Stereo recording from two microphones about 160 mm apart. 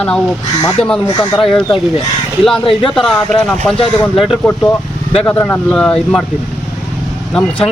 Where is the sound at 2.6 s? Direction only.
35° left (ahead or behind).